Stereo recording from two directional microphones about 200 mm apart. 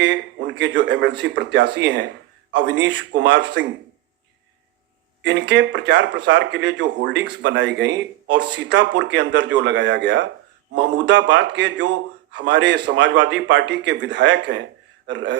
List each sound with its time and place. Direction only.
0.0 s a man's voice: 60° right (ahead or behind)
5.2 s speech: 60° right (ahead or behind)